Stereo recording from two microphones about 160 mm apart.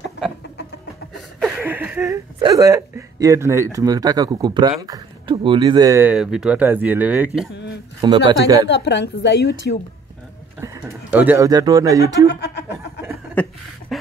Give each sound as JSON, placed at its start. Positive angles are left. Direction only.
{"t": 1.6, "sound": "a sound", "side_deg": -10}
{"t": 2.4, "sound": "speech", "side_deg": -20}
{"t": 6.0, "sound": "speech", "side_deg": -5}
{"t": 8.0, "sound": "speech", "side_deg": -30}
{"t": 8.6, "sound": "a woman's voice", "side_deg": 90}
{"t": 10.9, "sound": "speech", "side_deg": -10}
{"t": 11.4, "sound": "speech", "side_deg": -25}
{"t": 12.3, "sound": "music", "side_deg": 90}
{"t": 13.3, "sound": "chuckle", "side_deg": 10}